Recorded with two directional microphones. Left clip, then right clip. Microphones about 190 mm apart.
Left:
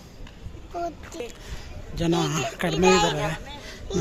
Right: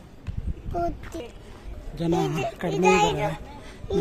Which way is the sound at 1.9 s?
Centre (ahead or behind).